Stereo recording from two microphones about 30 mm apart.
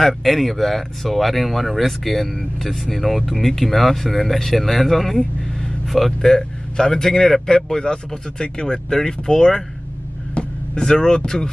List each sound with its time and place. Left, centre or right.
0.0 s a man's voice: centre
6.2 s speech: centre
7.4 s speech: left
10.7 s speech: left